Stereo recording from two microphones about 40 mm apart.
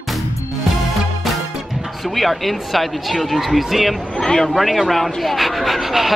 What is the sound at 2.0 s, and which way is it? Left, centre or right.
Speech, centre.